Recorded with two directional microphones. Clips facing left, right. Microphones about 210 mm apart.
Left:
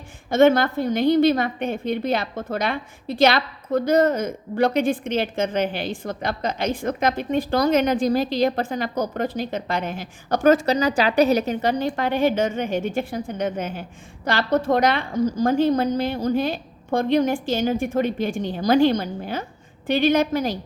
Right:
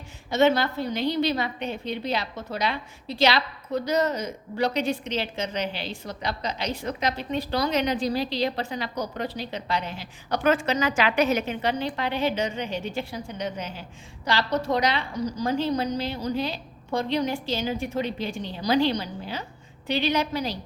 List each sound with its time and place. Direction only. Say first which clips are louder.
0.3 s a woman's voice: left 5 dB; 50° left (ahead or behind)